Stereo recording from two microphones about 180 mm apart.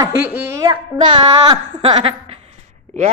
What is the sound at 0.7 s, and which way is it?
A woman's voice, 25° right (ahead or behind).